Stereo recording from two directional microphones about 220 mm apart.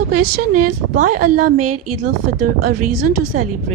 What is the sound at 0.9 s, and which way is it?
Speech, 40° right (ahead or behind).